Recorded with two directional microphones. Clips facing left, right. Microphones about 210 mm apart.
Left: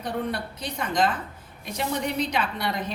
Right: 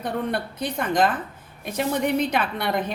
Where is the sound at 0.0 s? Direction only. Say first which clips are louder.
Right 3 dB; 55° right (ahead or behind).